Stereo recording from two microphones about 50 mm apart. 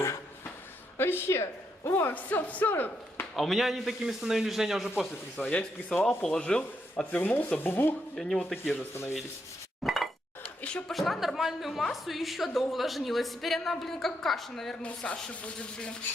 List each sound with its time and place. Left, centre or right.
0.9 s a woman's voice: left
1.9 s a woman's voice: left
2.1 s speech: left
3.3 s a man's voice: centre
5.4 s speech: left
6.1 s speech: centre
6.4 s speech: left
7.1 s speech: left
8.1 s speech: centre
9.8 s a sound: centre
10.6 s a sound: left
10.9 s a woman's voice: centre
14.8 s speech: left